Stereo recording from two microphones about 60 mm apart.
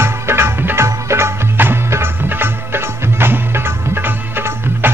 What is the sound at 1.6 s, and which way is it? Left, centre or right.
Music, right.